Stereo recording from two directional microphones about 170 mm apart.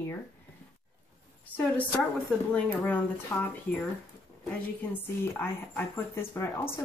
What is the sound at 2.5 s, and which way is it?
Speech, 10° left (ahead or behind).